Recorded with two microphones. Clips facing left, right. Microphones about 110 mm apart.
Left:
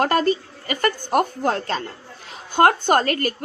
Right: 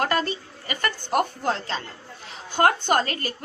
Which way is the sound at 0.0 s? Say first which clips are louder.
Left 6 dB; 40° left (ahead or behind).